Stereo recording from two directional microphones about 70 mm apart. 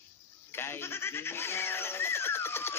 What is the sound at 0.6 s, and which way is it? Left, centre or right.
Music, left.